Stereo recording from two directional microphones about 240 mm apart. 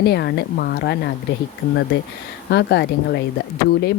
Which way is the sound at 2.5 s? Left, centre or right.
Left.